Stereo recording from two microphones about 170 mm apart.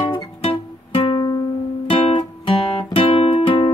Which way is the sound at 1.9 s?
30° left (ahead or behind).